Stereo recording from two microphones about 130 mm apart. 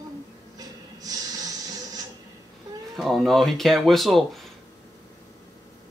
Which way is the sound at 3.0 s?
Centre (ahead or behind).